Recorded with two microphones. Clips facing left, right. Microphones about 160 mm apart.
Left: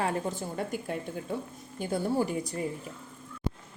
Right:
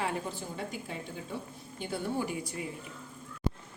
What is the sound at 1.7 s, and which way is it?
Speech, 40° left (ahead or behind).